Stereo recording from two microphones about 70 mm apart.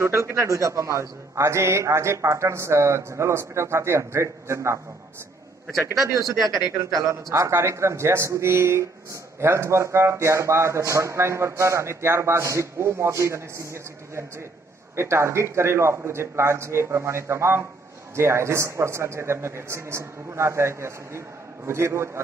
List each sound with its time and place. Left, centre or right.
0.0 s a man's voice: right
6.0 s a man's voice: right
15.0 s a man's voice: right